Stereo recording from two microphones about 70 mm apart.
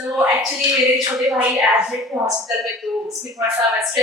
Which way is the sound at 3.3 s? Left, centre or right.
Right.